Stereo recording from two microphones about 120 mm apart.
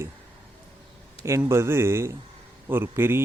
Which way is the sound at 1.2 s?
20° right (ahead or behind).